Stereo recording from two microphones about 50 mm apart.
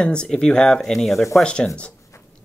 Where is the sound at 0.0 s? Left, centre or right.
Centre.